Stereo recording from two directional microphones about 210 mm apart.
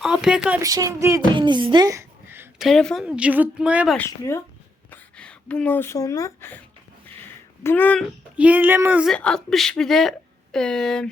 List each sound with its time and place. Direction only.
0.0 s a woman's voice: 5° right (ahead or behind)
0.6 s speech: 15° right (ahead or behind)
2.6 s a woman's voice: centre (ahead or behind)
3.9 s speech: 10° left (ahead or behind)
7.6 s speech: 10° left (ahead or behind)
8.4 s speech: 5° right (ahead or behind)
9.1 s a woman's voice: 5° left (ahead or behind)